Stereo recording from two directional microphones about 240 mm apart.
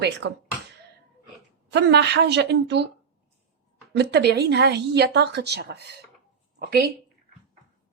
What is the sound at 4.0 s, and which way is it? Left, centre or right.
Speech, right.